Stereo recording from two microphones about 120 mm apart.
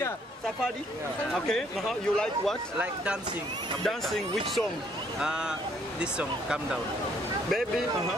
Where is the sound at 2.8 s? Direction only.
10° right (ahead or behind).